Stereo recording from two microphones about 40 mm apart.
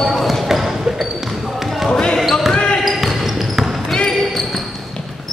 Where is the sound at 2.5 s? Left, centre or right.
Left.